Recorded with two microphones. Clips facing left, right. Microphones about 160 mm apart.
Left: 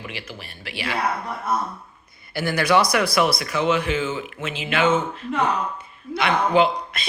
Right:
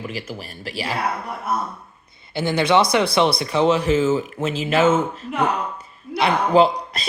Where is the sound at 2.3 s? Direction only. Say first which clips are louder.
Right 2 dB; 25° right (ahead or behind); by 4.9 s 40° right (ahead or behind).